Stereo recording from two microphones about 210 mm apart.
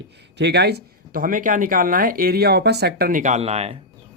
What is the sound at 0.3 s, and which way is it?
Speech, 55° right (ahead or behind).